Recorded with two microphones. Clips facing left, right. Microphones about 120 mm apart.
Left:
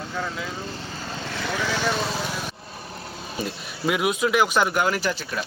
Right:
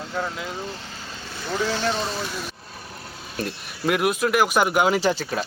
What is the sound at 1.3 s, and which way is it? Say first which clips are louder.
Speech: right 2 dB; 85° left.